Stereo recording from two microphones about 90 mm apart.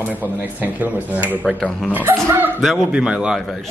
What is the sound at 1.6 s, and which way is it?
Speech, 10° left (ahead or behind).